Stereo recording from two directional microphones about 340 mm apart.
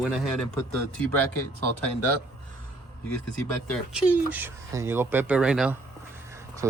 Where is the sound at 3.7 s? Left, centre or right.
Centre.